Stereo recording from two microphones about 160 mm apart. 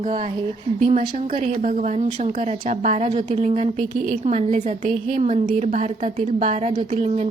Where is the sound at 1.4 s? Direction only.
55° right (ahead or behind).